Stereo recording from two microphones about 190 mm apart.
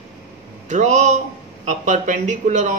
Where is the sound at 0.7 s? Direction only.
40° right (ahead or behind).